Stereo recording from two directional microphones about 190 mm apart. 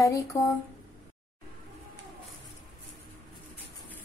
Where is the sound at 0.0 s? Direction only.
15° left (ahead or behind).